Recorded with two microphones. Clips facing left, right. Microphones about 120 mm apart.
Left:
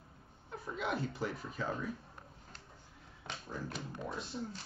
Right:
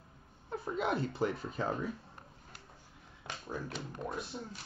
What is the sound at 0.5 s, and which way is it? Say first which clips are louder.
Speech: right 4 dB; 35° right (ahead or behind).